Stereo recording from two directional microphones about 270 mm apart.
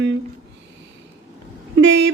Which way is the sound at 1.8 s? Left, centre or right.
Right.